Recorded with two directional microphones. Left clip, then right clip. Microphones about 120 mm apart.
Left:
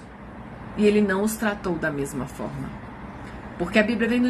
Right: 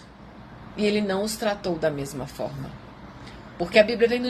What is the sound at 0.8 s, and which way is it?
Speech, 15° left (ahead or behind).